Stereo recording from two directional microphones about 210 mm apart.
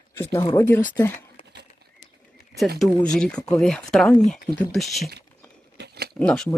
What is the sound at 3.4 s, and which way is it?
Speech, 15° left (ahead or behind).